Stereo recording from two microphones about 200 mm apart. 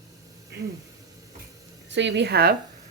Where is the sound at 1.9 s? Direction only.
60° right (ahead or behind).